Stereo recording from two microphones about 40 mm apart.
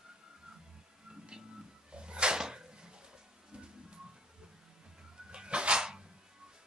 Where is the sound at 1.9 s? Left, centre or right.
Right.